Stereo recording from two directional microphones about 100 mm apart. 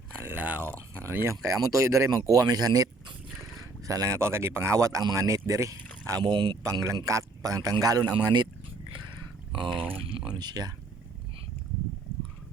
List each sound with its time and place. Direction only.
0.2 s a sound: 20° right (ahead or behind)
1.0 s speech: 25° right (ahead or behind); by 6.6 s 45° right (ahead or behind)
6.6 s speech: 30° right (ahead or behind)
8.1 s speech: 50° right (ahead or behind)
10.3 s speech: 45° right (ahead or behind)